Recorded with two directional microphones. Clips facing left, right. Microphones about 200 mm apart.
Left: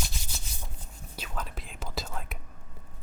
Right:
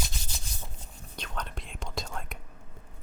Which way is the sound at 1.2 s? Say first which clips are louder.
Even; 5° left (ahead or behind).